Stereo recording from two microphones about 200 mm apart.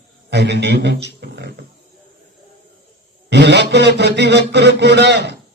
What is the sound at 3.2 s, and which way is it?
A man's voice, 60° right (ahead or behind).